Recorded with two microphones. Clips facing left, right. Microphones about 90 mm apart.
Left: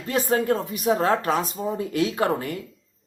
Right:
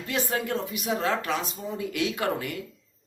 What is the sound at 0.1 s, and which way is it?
Speech, 35° left (ahead or behind).